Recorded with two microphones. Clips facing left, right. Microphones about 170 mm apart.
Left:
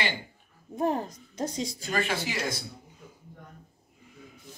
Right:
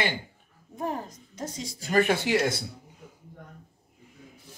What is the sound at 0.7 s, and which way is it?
A woman's voice, 25° left (ahead or behind).